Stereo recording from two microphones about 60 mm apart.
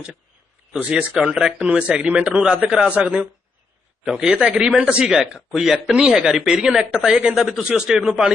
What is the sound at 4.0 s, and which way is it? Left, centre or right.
Speech, centre.